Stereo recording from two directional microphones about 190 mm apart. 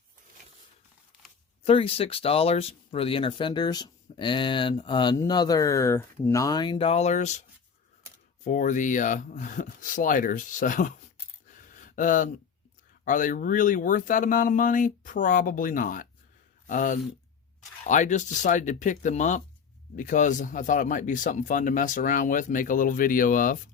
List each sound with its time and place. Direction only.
1.6 s speech: 30° left (ahead or behind)
8.4 s speech: 40° left (ahead or behind)
11.7 s a sound: 45° left (ahead or behind)
13.1 s speech: 45° left (ahead or behind)